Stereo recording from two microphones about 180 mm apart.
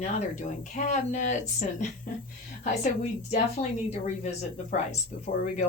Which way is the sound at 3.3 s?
40° left (ahead or behind).